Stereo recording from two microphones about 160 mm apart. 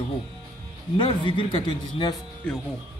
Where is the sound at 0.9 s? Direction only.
30° left (ahead or behind).